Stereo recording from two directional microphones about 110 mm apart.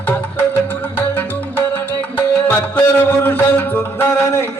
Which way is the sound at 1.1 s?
20° left (ahead or behind).